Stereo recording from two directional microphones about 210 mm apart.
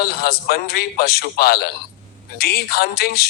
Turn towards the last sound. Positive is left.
turn(degrees=50)  # may be behind; listen again after turning